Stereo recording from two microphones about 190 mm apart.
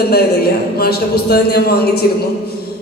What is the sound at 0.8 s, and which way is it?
Speech, 55° left (ahead or behind).